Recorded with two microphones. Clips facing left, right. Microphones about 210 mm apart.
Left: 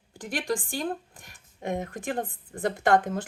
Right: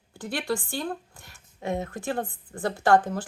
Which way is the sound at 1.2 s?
15° left (ahead or behind).